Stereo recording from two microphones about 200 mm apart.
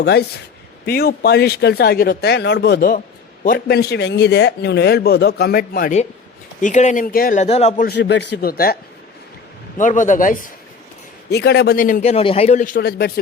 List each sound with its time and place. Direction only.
0.0 s a man's voice: 55° left (ahead or behind); by 7.9 s 35° left (ahead or behind)
7.9 s a man's voice: 60° left (ahead or behind); by 10.5 s 40° left (ahead or behind)
11.3 s a man's voice: 55° left (ahead or behind)